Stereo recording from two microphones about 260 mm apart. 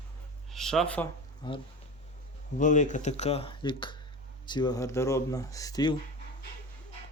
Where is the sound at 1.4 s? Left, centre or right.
Centre.